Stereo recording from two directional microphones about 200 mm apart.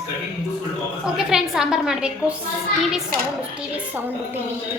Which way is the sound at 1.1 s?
Centre (ahead or behind).